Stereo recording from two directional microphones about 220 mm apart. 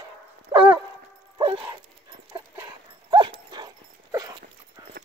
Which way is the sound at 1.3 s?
25° right (ahead or behind).